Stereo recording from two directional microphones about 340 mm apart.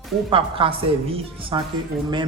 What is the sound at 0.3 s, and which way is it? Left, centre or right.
A woman's voice, centre.